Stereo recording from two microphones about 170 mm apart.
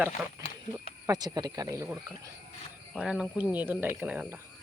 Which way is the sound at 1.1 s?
25° right (ahead or behind).